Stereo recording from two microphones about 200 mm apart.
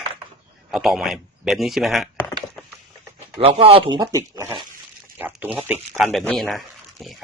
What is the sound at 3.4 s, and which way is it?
Speech, 30° right (ahead or behind).